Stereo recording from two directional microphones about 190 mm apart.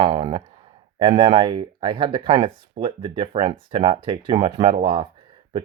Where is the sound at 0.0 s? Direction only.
30° right (ahead or behind).